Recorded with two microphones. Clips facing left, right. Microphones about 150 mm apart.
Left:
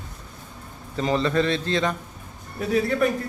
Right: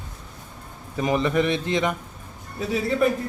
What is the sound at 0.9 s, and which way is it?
A man's voice, 15° right (ahead or behind).